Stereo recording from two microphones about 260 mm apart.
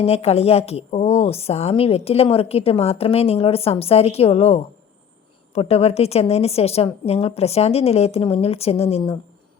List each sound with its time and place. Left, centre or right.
0.0 s a woman's voice: left